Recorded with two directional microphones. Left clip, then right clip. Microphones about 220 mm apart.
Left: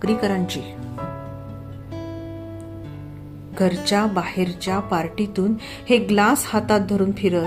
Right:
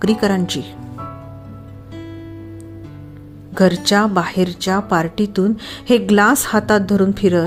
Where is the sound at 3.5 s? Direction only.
25° right (ahead or behind).